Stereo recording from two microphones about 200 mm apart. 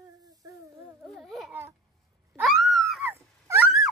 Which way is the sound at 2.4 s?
Centre (ahead or behind).